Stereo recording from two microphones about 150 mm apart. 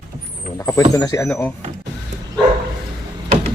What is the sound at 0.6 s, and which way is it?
Speech, 25° left (ahead or behind).